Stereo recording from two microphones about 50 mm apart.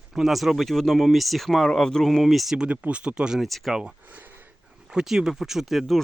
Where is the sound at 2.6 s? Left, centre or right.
Right.